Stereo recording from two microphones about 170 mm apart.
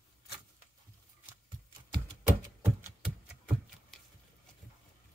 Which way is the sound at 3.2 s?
5° right (ahead or behind).